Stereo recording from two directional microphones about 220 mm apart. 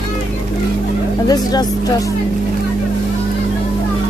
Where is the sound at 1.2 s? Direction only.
15° left (ahead or behind).